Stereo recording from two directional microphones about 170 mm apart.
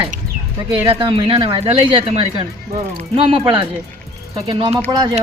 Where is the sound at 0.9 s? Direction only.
35° right (ahead or behind).